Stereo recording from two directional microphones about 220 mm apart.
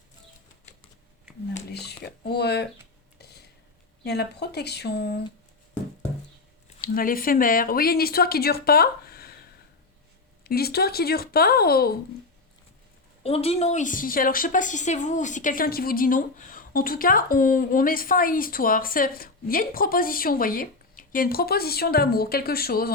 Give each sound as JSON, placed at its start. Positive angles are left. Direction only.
{"t": 1.7, "sound": "speech", "side_deg": 50}
{"t": 3.2, "sound": "a sound", "side_deg": 45}
{"t": 4.0, "sound": "speech", "side_deg": 50}
{"t": 6.8, "sound": "speech", "side_deg": 40}
{"t": 10.4, "sound": "speech", "side_deg": 45}
{"t": 13.2, "sound": "a woman's voice", "side_deg": 25}